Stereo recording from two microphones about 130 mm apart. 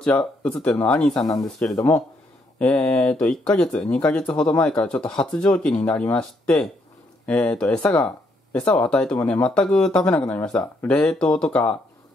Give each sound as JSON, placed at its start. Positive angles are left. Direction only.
{"t": 0.0, "sound": "speech", "side_deg": 10}
{"t": 1.2, "sound": "speech", "side_deg": 30}
{"t": 2.6, "sound": "speech", "side_deg": 10}